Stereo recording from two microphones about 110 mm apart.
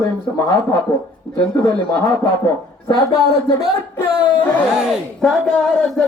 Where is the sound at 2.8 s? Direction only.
35° left (ahead or behind).